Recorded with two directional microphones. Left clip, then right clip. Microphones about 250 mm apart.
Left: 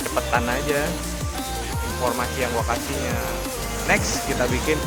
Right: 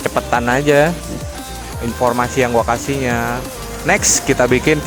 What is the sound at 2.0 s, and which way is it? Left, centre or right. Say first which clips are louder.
Speech: right 9 dB; right.